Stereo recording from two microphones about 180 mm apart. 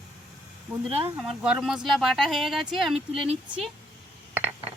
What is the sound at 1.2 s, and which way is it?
Speech, 5° right (ahead or behind).